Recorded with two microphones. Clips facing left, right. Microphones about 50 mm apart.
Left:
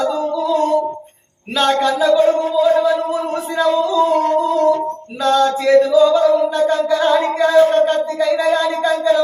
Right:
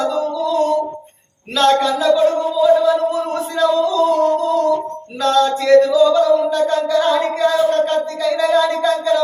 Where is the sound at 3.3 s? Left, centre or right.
Centre.